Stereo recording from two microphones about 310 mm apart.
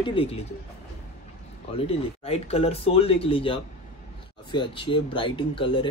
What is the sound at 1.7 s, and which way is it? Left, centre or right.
Speech, centre.